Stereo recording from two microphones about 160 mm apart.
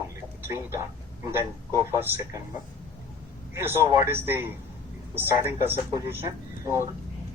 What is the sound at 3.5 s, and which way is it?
Speech, 15° right (ahead or behind).